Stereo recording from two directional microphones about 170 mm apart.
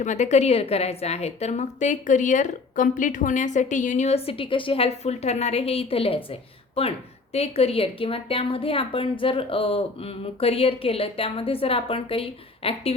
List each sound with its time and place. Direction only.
0.0 s a woman's voice: 45° left (ahead or behind)